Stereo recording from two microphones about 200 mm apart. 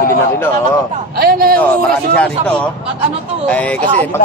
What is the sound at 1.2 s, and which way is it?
Speech, 50° right (ahead or behind).